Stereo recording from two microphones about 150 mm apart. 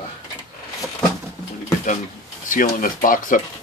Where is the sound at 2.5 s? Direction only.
65° left (ahead or behind).